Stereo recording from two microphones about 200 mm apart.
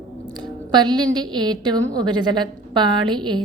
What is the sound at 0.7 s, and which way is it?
A woman's voice, 20° right (ahead or behind).